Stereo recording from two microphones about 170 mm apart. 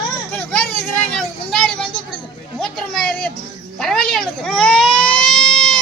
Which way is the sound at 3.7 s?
5° left (ahead or behind).